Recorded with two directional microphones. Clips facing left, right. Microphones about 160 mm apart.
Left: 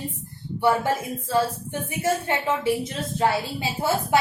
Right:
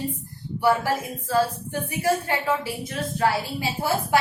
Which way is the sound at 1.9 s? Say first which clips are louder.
Even; 20° left (ahead or behind).